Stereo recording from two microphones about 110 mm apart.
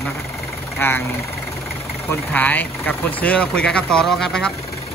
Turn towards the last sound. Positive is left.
turn(degrees=5)  # may be behind; listen again after turning